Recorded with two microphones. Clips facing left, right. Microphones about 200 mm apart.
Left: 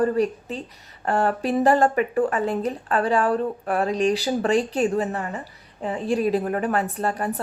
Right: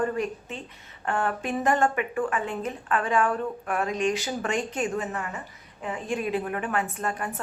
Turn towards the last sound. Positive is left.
turn(degrees=35)  # may be behind; listen again after turning